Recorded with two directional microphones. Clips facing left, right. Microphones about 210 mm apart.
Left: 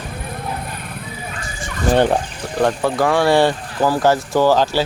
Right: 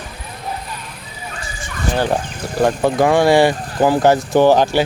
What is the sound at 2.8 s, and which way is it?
Speech, 20° right (ahead or behind).